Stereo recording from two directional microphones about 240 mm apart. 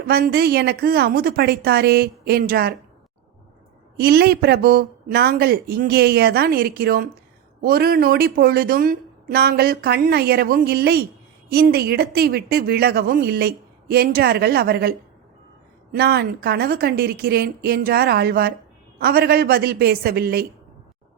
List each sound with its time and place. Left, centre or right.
0.1 s a woman's voice: right
3.9 s a woman's voice: right